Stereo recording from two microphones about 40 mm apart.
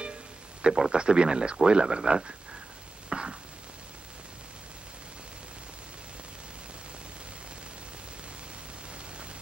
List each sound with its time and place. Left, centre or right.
0.0 s music: right
0.9 s speech: right
3.1 s chopping: right